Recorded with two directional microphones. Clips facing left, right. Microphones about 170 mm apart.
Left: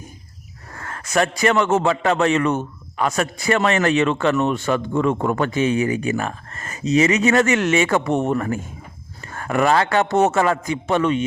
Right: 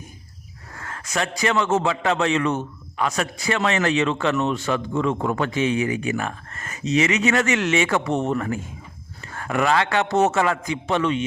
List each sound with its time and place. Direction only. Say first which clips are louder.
0.7 s a man's voice: left 5 dB; 50° left (ahead or behind)